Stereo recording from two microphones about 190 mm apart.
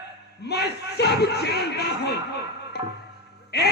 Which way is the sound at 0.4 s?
60° left (ahead or behind).